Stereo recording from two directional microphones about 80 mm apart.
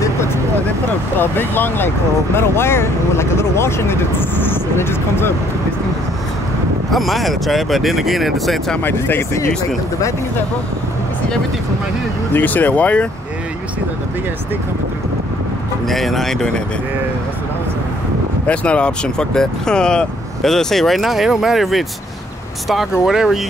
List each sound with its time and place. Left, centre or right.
0.0 s vehicle: left
1.2 s speech: left
6.9 s speech: centre
8.8 s speech: left
12.4 s speech: left
15.9 s speech: centre
18.5 s speech: centre